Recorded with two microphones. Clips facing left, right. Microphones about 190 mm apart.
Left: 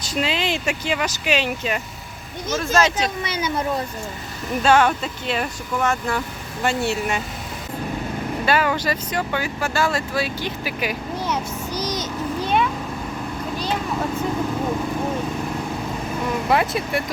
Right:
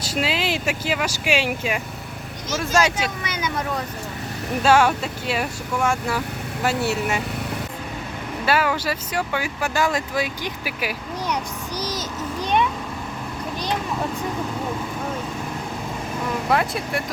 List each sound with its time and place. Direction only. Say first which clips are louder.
0.0 s speech: even; 5° right (ahead or behind)
3.0 s speech: left 2 dB; 30° left (ahead or behind)
4.6 s speech: even; 5° right (ahead or behind)
8.4 s speech: even; 5° right (ahead or behind)
11.8 s a sound: left 2 dB; 10° right (ahead or behind)
16.5 s speech: left 2 dB; centre (ahead or behind)